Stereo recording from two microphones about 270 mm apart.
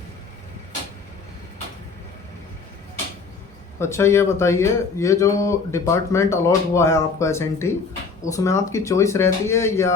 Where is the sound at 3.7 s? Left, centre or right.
Centre.